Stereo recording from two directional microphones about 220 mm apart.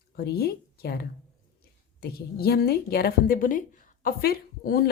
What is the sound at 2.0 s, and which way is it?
A woman's voice, 45° left (ahead or behind).